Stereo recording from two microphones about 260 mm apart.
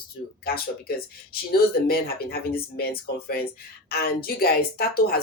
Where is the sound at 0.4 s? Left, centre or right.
Left.